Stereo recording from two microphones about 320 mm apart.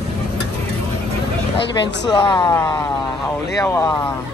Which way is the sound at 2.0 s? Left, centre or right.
Centre.